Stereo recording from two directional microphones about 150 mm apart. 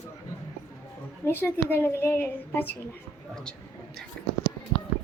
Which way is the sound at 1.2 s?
15° left (ahead or behind).